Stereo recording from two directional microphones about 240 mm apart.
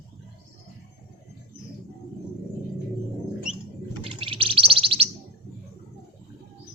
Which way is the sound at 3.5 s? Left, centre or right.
Centre.